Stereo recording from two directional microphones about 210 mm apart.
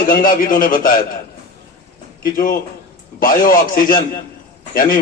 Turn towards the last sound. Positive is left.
turn(degrees=40)  # may be behind; listen again after turning